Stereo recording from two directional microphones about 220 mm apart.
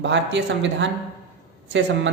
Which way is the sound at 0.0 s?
55° right (ahead or behind).